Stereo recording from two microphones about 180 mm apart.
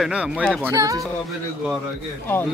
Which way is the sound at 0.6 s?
15° right (ahead or behind).